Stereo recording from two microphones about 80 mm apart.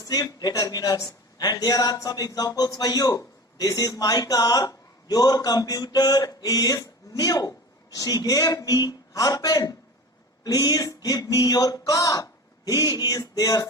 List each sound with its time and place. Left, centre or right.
0.0 s a man's voice: left